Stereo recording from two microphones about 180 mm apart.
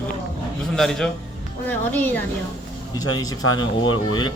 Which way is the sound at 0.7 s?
Centre (ahead or behind).